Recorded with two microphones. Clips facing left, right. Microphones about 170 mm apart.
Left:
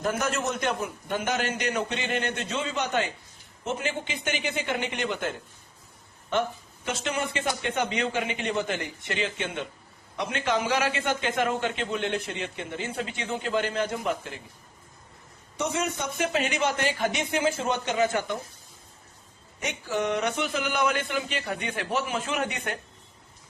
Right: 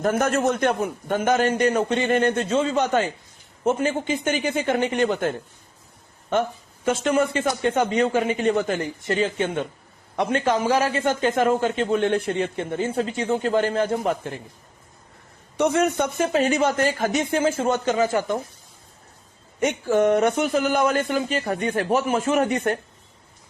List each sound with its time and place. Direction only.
0.0 s a man's voice: 50° right (ahead or behind)
6.8 s a man's voice: 50° right (ahead or behind)
15.5 s speech: 60° right (ahead or behind)
16.2 s a man's voice: 40° right (ahead or behind)
19.5 s a man's voice: 50° right (ahead or behind)